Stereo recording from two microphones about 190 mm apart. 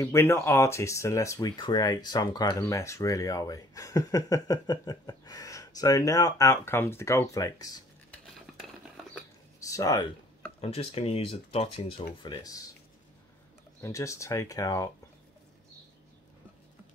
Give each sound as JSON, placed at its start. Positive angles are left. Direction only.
{"t": 0.0, "sound": "speech", "side_deg": 15}
{"t": 9.6, "sound": "speech", "side_deg": 15}
{"t": 10.6, "sound": "speech", "side_deg": 30}
{"t": 13.7, "sound": "speech", "side_deg": 15}